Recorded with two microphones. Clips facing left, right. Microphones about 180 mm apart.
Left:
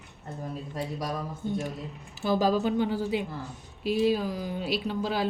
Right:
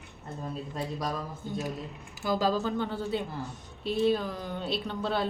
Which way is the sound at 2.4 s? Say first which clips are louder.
Left 4 dB; 10° left (ahead or behind).